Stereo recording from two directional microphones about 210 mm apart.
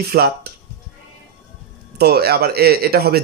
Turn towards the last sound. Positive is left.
turn(degrees=-45)  # may be behind; listen again after turning